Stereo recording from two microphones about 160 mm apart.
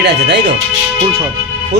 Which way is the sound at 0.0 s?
90° right.